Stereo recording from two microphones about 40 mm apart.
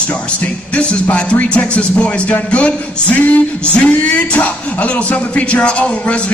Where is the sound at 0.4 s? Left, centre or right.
Left.